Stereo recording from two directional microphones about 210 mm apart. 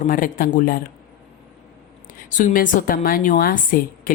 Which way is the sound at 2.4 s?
45° left (ahead or behind).